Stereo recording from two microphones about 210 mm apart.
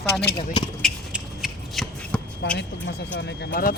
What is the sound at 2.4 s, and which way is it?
Speech, 55° left (ahead or behind).